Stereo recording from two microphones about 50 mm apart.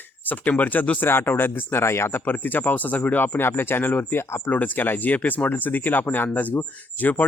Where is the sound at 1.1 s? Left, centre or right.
Left.